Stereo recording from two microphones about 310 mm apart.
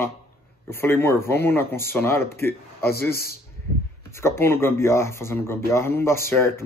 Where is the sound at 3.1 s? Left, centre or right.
Left.